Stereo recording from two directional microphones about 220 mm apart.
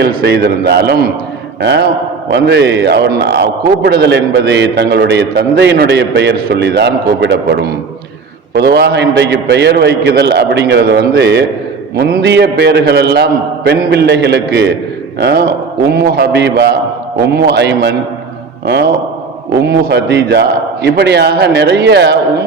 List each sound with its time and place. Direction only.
0.0 s a man's voice: 45° right (ahead or behind)